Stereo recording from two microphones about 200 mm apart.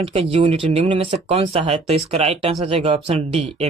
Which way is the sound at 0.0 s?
30° right (ahead or behind).